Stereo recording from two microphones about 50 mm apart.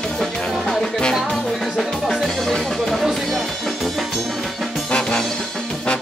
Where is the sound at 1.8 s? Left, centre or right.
Centre.